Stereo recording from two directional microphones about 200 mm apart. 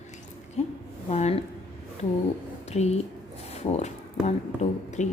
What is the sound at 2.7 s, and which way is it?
Speech, 35° left (ahead or behind).